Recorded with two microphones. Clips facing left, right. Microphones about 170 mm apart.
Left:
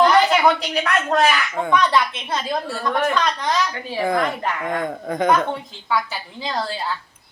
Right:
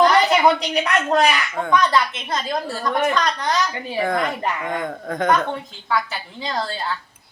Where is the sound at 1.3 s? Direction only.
5° left (ahead or behind).